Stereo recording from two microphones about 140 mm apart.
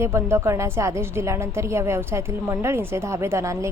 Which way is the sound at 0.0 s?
15° right (ahead or behind).